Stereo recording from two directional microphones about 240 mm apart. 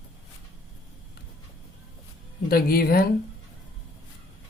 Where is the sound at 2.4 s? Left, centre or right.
Left.